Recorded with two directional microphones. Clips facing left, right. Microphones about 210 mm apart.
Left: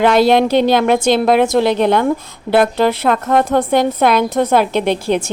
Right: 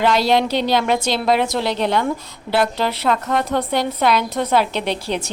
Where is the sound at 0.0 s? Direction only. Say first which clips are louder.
Left 6 dB; 55° left (ahead or behind).